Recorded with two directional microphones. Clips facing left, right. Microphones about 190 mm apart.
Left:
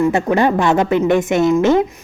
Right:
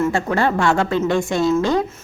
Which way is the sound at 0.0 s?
15° left (ahead or behind).